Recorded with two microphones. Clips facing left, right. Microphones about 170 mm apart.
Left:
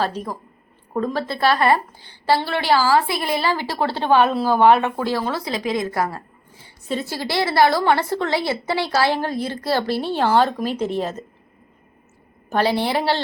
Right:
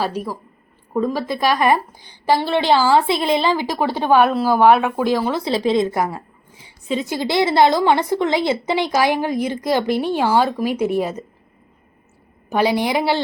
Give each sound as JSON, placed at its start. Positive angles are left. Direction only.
{"t": 0.0, "sound": "speech", "side_deg": -10}
{"t": 5.5, "sound": "a woman's voice", "side_deg": -30}
{"t": 12.5, "sound": "speech", "side_deg": -10}